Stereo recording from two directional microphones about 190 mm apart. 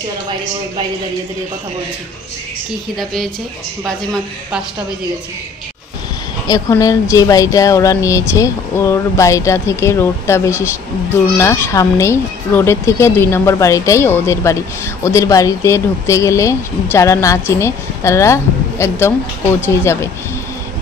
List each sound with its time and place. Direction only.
3.8 s a man's voice: centre (ahead or behind)
6.4 s speech: 20° left (ahead or behind)